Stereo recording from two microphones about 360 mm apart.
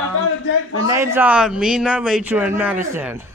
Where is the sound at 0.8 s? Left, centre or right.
Centre.